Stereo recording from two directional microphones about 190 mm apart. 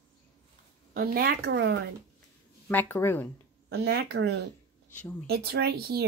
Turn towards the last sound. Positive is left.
turn(degrees=-55)  # may be behind; listen again after turning